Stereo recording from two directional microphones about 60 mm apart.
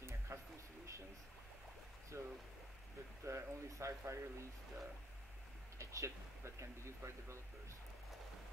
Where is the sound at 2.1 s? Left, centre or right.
Right.